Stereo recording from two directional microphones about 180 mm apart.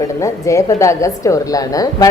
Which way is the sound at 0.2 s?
20° left (ahead or behind).